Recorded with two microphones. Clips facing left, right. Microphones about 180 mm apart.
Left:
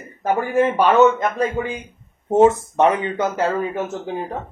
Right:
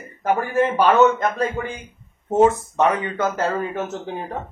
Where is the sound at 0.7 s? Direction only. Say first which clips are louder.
Left 1 dB; 15° left (ahead or behind).